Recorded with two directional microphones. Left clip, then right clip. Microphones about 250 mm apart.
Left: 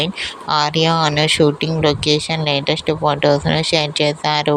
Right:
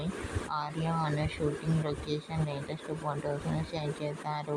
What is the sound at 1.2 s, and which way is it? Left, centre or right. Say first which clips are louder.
Speech: left 19 dB; left.